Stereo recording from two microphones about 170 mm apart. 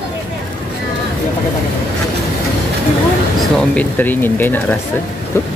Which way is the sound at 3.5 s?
10° left (ahead or behind).